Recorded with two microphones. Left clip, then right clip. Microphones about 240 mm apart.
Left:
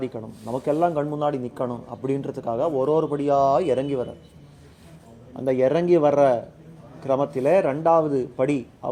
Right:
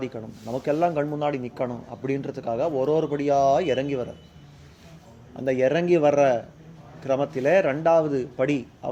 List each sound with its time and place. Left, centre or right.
0.0 s speech: centre
5.5 s a man's voice: centre